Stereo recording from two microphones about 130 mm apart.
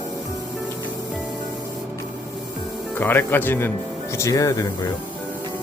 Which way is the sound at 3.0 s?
15° left (ahead or behind).